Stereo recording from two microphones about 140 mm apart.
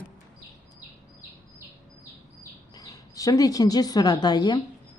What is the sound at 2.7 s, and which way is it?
Speech, 25° left (ahead or behind).